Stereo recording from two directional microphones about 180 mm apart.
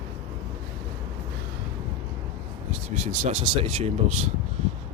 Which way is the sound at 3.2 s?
30° right (ahead or behind).